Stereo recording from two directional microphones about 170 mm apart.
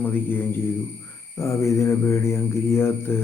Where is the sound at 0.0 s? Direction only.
10° left (ahead or behind).